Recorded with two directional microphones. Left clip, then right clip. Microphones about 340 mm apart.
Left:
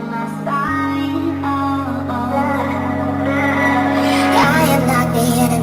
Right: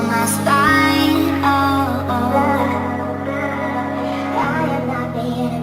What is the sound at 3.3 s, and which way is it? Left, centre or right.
Music, centre.